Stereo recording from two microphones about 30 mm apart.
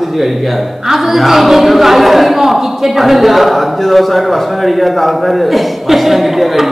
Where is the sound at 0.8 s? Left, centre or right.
Centre.